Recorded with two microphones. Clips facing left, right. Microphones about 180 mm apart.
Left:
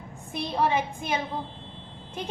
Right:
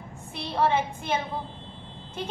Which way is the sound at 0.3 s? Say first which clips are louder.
Right 1 dB; 15° left (ahead or behind).